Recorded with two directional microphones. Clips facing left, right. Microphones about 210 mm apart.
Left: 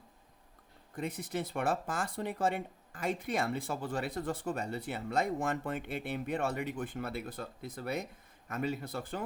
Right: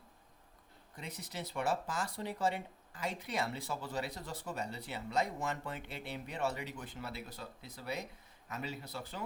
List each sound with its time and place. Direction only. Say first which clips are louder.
0.9 s speech: left 9 dB; 50° left (ahead or behind)